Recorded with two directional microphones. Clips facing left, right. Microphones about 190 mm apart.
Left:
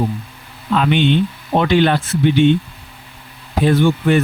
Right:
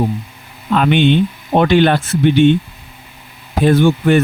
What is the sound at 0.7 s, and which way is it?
Speech, 55° right (ahead or behind).